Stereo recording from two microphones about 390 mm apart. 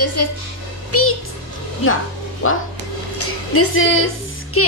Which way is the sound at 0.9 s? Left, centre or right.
Left.